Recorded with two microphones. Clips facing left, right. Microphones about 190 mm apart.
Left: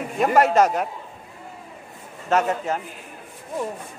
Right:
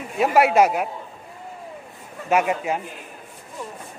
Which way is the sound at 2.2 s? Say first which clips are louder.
Right 1 dB; 10° right (ahead or behind).